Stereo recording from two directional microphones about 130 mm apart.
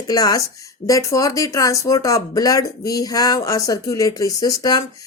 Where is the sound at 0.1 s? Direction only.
30° left (ahead or behind).